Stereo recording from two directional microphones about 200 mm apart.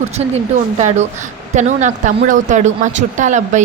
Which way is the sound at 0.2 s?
35° right (ahead or behind).